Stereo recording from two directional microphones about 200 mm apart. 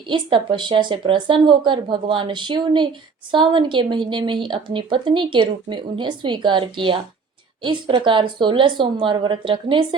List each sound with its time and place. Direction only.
0.1 s a woman's voice: 25° right (ahead or behind)